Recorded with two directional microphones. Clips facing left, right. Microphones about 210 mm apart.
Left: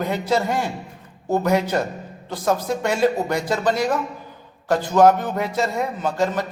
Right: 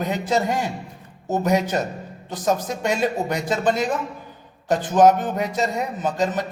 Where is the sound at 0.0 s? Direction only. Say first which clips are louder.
Left 1 dB; 20° right (ahead or behind).